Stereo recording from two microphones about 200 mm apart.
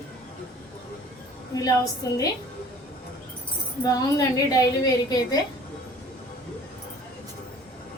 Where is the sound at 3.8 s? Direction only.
15° left (ahead or behind).